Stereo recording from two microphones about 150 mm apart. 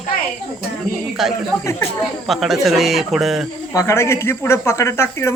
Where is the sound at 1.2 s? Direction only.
Centre (ahead or behind).